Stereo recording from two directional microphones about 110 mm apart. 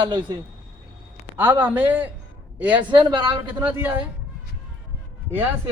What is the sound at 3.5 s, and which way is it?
Speech, 15° right (ahead or behind).